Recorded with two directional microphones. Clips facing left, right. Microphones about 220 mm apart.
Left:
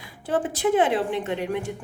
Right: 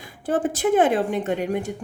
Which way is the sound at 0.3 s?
45° right (ahead or behind).